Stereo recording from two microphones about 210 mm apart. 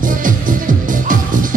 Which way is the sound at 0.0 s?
40° right (ahead or behind).